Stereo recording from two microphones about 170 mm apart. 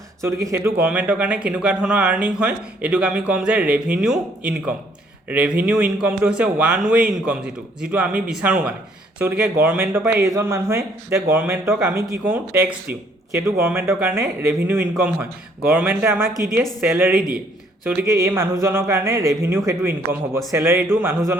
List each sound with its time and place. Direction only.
0.2 s a man's voice: 15° right (ahead or behind)